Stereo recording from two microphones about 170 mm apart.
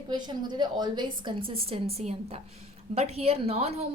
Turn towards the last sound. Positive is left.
turn(degrees=-40)  # may be behind; listen again after turning